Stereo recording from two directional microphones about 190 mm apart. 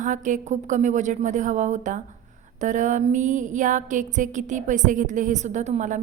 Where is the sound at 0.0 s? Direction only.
40° right (ahead or behind).